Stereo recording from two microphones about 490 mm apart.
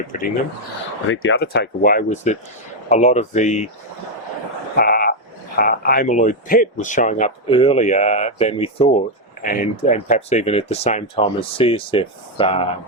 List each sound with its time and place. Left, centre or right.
1.0 s speech: left
4.8 s frog: centre
5.5 s speech: centre